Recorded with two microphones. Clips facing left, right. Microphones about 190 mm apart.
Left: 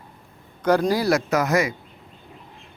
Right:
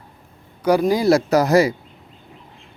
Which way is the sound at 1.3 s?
35° right (ahead or behind).